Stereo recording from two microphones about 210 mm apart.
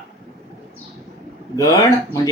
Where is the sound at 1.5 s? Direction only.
15° left (ahead or behind).